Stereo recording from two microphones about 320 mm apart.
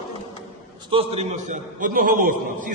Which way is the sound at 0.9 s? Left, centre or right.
Centre.